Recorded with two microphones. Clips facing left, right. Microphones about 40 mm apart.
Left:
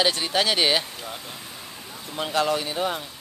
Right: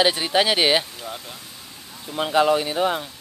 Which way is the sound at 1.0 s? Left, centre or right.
Centre.